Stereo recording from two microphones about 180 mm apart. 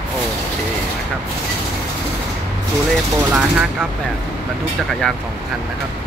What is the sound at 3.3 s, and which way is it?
Speech, 5° right (ahead or behind).